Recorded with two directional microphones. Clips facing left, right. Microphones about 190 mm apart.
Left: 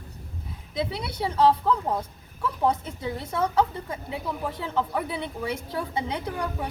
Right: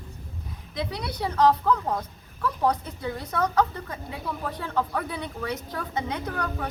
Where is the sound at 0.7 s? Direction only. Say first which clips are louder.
Left 2 dB; 25° left (ahead or behind).